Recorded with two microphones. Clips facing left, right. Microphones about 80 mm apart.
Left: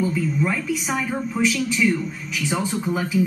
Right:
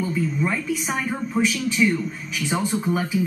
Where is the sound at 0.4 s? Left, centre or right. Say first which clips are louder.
Left 1 dB; centre.